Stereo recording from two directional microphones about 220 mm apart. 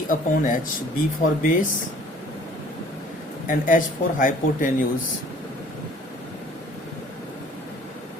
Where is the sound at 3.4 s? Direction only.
35° left (ahead or behind).